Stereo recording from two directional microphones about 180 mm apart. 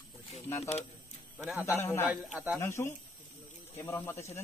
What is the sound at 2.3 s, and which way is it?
Speech, 5° right (ahead or behind).